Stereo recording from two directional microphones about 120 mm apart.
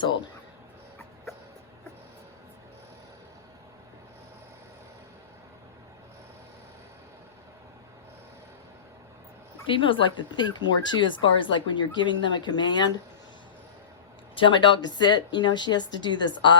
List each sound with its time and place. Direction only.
9.6 s speech: 45° left (ahead or behind)
14.3 s speech: 40° left (ahead or behind)